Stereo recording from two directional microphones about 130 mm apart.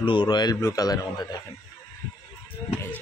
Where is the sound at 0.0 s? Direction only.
35° left (ahead or behind).